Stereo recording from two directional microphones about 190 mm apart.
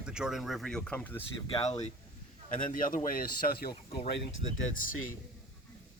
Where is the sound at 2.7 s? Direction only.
45° left (ahead or behind).